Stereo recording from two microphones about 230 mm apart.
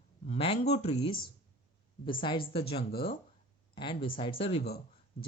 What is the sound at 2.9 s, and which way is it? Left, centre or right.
Speech, left.